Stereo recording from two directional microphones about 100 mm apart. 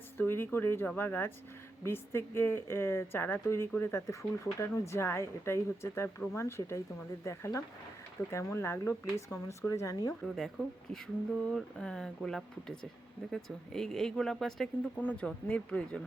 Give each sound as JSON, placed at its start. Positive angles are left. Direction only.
{"t": 0.2, "sound": "speech", "side_deg": 20}
{"t": 10.1, "sound": "speech", "side_deg": 5}
{"t": 14.9, "sound": "speech", "side_deg": 15}